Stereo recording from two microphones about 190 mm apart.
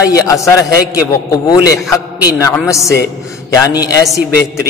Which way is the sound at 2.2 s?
20° left (ahead or behind).